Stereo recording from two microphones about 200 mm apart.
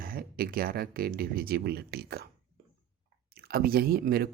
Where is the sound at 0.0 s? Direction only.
45° right (ahead or behind).